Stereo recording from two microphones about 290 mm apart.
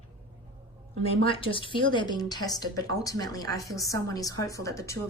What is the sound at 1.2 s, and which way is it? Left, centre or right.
A woman's voice, centre.